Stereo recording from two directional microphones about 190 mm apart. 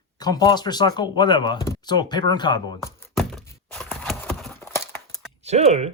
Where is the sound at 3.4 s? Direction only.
10° left (ahead or behind).